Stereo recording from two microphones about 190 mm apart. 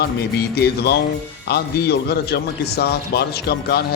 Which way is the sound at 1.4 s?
60° left (ahead or behind).